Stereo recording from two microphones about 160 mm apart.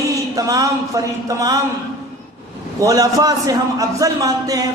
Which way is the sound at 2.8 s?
20° right (ahead or behind).